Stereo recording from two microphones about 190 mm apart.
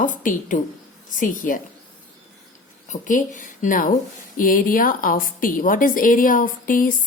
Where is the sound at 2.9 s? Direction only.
40° left (ahead or behind).